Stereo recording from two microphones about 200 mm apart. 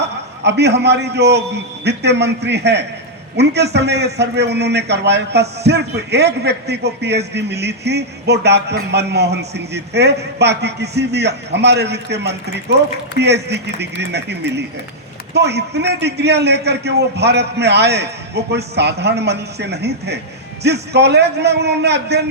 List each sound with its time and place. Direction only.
0.0 s a man's voice: 55° right (ahead or behind)